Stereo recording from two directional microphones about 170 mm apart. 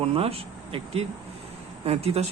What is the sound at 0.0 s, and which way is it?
Speech, 35° right (ahead or behind).